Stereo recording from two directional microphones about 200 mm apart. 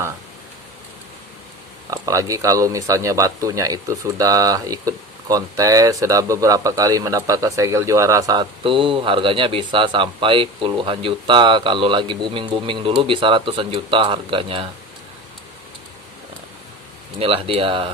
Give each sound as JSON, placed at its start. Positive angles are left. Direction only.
{"t": 1.9, "sound": "speech", "side_deg": -15}
{"t": 17.2, "sound": "speech", "side_deg": -30}